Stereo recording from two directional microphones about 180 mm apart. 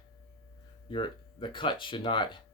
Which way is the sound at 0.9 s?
25° left (ahead or behind).